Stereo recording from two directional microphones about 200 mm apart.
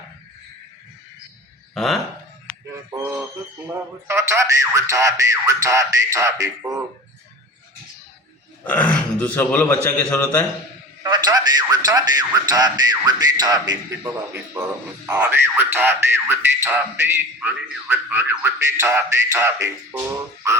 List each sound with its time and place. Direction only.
1.7 s speech: centre (ahead or behind)
2.5 s music: 5° left (ahead or behind)
2.9 s music: 10° right (ahead or behind)
3.7 s speech: 15° right (ahead or behind)
8.6 s speech: 10° left (ahead or behind)
11.0 s a man's voice: 20° right (ahead or behind)